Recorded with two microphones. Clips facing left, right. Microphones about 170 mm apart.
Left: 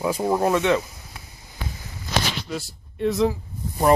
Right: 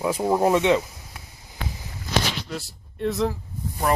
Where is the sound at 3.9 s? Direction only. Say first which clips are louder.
Left 6 dB; 25° left (ahead or behind).